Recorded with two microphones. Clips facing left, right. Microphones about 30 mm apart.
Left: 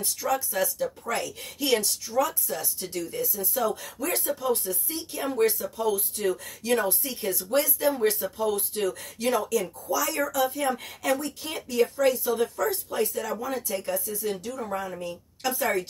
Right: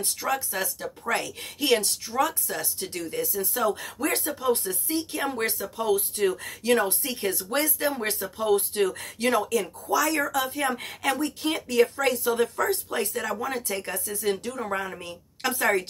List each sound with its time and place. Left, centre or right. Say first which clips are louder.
0.0 s a woman's voice: even; right
4.2 s a woman's voice: right 1 dB; right
7.2 s speech: left 2 dB; right
8.0 s a woman's voice: left 4 dB; right
8.5 s speech: right 6 dB; right